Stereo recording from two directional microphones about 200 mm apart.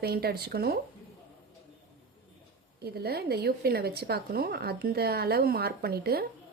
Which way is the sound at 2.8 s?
50° right (ahead or behind).